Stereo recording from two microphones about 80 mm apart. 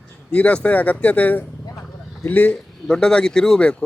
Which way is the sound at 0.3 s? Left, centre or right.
Centre.